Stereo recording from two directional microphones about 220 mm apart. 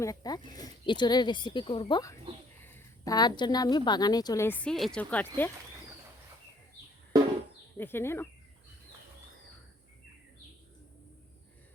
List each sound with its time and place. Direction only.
0.0 s a woman's voice: 15° left (ahead or behind)
7.8 s a woman's voice: 10° left (ahead or behind)